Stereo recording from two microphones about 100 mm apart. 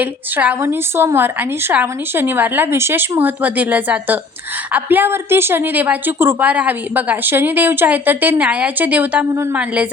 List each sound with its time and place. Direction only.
0.0 s a woman's voice: 15° right (ahead or behind)
9.3 s speech: 25° right (ahead or behind)
9.6 s a woman's voice: 10° right (ahead or behind)